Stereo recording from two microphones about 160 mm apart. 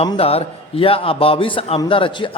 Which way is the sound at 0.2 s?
40° left (ahead or behind).